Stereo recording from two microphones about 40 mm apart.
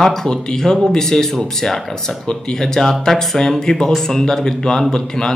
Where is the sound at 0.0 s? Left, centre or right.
Centre.